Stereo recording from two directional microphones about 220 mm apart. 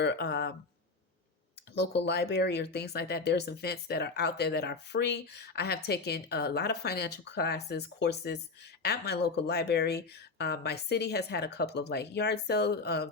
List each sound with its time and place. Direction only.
0.0 s speech: 50° left (ahead or behind)
1.7 s speech: 50° left (ahead or behind)